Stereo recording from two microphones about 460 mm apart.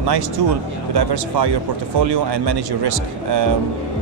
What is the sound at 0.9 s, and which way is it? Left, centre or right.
Speech, right.